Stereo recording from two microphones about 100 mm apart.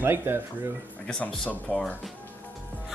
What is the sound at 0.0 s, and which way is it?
Speech, 20° right (ahead or behind).